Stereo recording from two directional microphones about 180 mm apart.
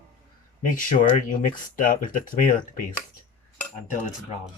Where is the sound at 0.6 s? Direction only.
50° left (ahead or behind).